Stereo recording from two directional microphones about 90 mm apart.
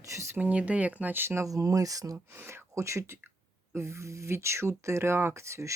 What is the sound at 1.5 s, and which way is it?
Speech, 40° right (ahead or behind).